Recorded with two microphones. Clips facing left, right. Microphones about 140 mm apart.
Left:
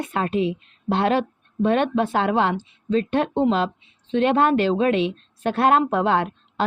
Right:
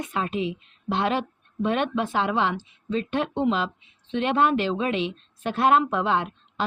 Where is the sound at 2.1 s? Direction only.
50° left (ahead or behind).